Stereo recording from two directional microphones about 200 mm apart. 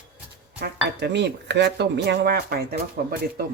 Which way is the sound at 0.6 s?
60° right (ahead or behind).